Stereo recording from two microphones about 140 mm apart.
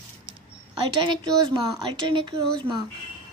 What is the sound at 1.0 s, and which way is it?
A woman's voice, 30° right (ahead or behind).